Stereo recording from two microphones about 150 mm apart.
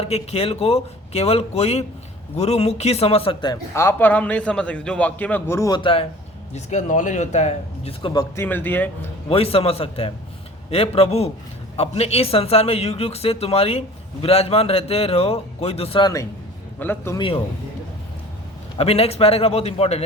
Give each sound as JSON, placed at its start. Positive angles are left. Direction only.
{"t": 0.0, "sound": "speech", "side_deg": 45}
{"t": 3.5, "sound": "a man's voice", "side_deg": 15}
{"t": 5.8, "sound": "speech", "side_deg": 35}
{"t": 6.5, "sound": "speech", "side_deg": 50}
{"t": 8.0, "sound": "speech", "side_deg": 25}
{"t": 8.4, "sound": "a man's voice", "side_deg": 15}
{"t": 9.3, "sound": "speech", "side_deg": 40}
{"t": 16.8, "sound": "a man's voice", "side_deg": 15}
{"t": 17.2, "sound": "speech", "side_deg": 35}
{"t": 18.8, "sound": "speech", "side_deg": 40}